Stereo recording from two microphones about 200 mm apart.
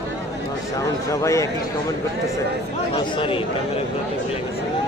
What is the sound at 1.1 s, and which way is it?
Speech, 15° left (ahead or behind).